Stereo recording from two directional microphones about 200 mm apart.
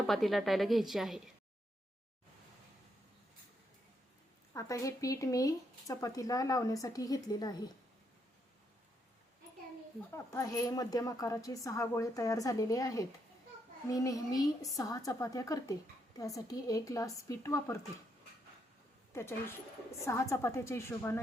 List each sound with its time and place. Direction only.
0.1 s a woman's voice: centre (ahead or behind)
4.5 s speech: 15° left (ahead or behind)
10.1 s speech: 15° left (ahead or behind)
19.1 s speech: 10° left (ahead or behind)